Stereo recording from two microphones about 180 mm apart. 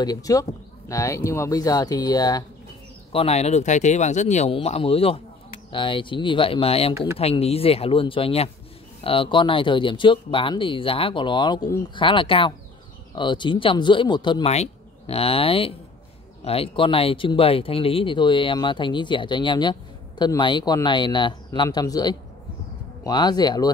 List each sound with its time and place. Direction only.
0.0 s speech: 20° left (ahead or behind)
3.1 s speech: 35° left (ahead or behind)